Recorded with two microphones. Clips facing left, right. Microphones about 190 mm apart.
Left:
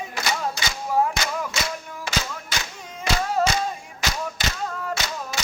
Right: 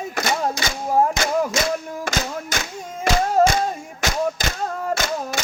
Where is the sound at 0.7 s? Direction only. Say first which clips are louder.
Right 3 dB; 45° right (ahead or behind).